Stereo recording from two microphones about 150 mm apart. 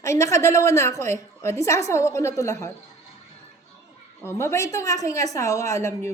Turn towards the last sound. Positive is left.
turn(degrees=20)  # may be behind; listen again after turning